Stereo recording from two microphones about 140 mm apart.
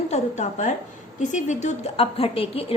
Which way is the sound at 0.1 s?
55° left (ahead or behind).